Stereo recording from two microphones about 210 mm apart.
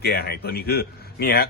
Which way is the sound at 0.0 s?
50° left (ahead or behind).